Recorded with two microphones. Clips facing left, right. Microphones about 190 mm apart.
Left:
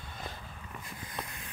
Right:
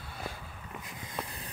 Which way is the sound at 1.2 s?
35° right (ahead or behind).